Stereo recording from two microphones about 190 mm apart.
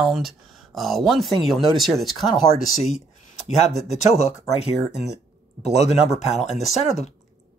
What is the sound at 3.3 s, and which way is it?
Speech, 35° left (ahead or behind).